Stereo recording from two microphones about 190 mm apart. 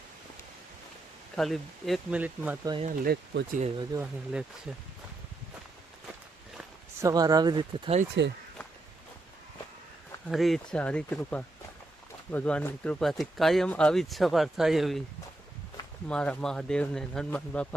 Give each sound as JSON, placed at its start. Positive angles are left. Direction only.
{"t": 1.4, "sound": "speech", "side_deg": 0}
{"t": 2.8, "sound": "speech", "side_deg": -50}
{"t": 4.0, "sound": "speech", "side_deg": -5}
{"t": 7.0, "sound": "speech", "side_deg": -20}
{"t": 8.2, "sound": "speech", "side_deg": -70}
{"t": 10.2, "sound": "speech", "side_deg": 0}
{"t": 16.0, "sound": "speech", "side_deg": 5}